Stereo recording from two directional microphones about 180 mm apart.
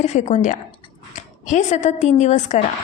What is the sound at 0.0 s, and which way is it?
Speech, 40° left (ahead or behind).